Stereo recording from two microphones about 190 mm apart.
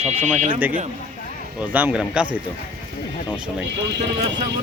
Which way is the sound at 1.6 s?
10° right (ahead or behind).